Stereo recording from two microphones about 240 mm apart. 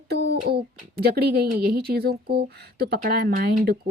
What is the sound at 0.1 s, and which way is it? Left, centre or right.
Speech, right.